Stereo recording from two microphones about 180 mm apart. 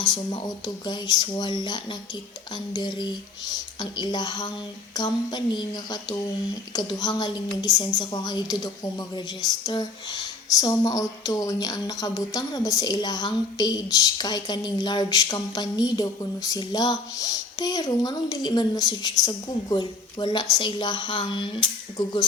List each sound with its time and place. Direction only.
0.0 s speech: 25° left (ahead or behind)